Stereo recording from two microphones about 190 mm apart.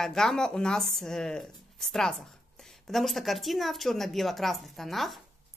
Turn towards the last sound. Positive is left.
turn(degrees=0)  # may be behind; listen again after turning